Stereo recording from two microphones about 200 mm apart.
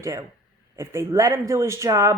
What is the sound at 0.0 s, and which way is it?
Speech, 15° right (ahead or behind).